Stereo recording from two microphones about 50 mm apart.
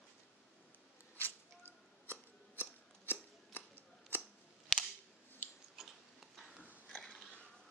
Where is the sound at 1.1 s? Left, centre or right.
Left.